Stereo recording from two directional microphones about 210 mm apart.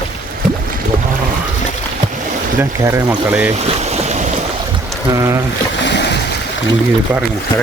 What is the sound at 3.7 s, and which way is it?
Boat, 30° right (ahead or behind).